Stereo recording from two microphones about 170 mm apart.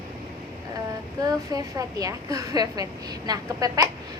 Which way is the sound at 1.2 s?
20° right (ahead or behind).